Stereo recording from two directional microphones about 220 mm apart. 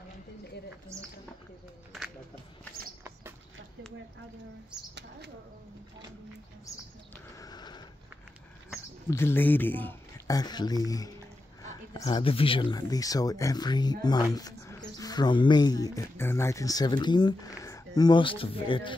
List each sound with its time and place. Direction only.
0.9 s speech: 15° right (ahead or behind)
7.3 s a sound: 20° left (ahead or behind)
9.1 s speech: 10° left (ahead or behind)